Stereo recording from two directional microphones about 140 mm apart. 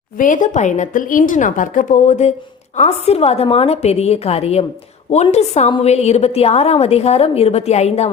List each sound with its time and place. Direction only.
0.2 s a woman's voice: 65° left (ahead or behind); by 8.1 s 50° left (ahead or behind)